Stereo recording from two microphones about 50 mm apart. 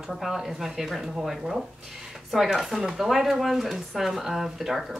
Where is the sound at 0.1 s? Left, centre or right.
Centre.